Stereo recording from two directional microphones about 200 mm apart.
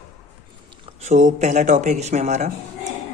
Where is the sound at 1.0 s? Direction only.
35° right (ahead or behind).